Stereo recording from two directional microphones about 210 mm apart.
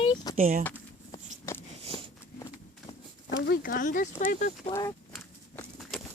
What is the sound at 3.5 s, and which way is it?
Speech, 40° left (ahead or behind).